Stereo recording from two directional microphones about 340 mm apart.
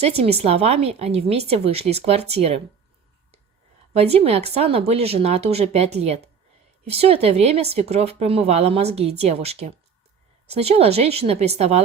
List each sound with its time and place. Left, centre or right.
0.0 s speech: centre
3.9 s speech: centre